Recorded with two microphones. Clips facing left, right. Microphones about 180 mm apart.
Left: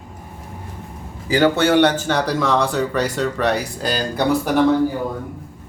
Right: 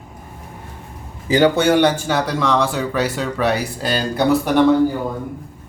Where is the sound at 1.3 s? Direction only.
15° right (ahead or behind); by 4.6 s centre (ahead or behind).